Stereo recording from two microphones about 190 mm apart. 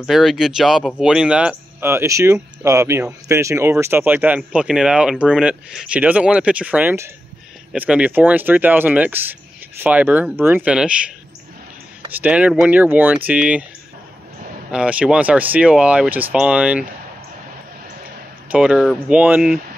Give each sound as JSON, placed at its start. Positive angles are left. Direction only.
{"t": 0.0, "sound": "speech", "side_deg": 0}
{"t": 12.1, "sound": "speech", "side_deg": -10}
{"t": 14.7, "sound": "speech", "side_deg": -5}
{"t": 18.5, "sound": "speech", "side_deg": -5}